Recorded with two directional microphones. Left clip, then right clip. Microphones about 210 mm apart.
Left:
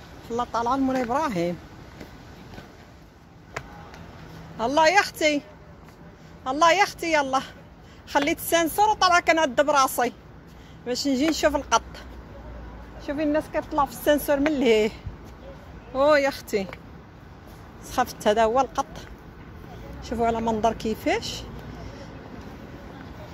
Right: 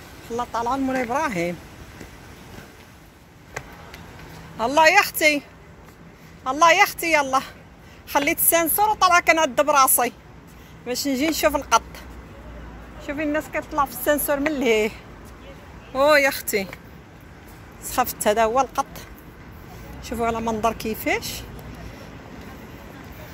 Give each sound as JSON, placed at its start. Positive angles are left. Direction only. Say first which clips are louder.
{"t": 0.3, "sound": "a woman's voice", "louder": "even", "side_deg": 15}
{"t": 4.6, "sound": "a woman's voice", "louder": "right 3 dB", "side_deg": 10}
{"t": 6.4, "sound": "a woman's voice", "louder": "right 3 dB", "side_deg": 10}
{"t": 13.0, "sound": "a woman's voice", "louder": "even", "side_deg": 20}
{"t": 17.8, "sound": "a woman's voice", "louder": "right 2 dB", "side_deg": 10}